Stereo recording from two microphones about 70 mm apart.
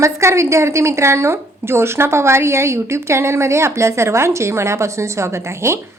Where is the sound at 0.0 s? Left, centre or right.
Right.